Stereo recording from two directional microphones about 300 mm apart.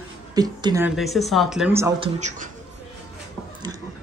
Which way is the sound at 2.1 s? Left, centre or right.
Right.